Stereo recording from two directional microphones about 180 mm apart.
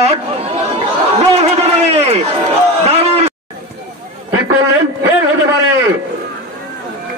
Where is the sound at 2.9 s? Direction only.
35° right (ahead or behind).